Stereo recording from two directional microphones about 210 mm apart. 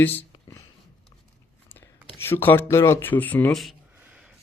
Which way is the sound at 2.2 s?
10° left (ahead or behind).